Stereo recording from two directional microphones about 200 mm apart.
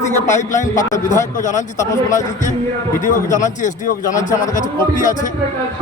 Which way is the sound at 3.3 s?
40° left (ahead or behind).